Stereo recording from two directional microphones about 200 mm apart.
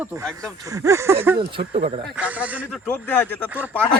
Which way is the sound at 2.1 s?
5° right (ahead or behind).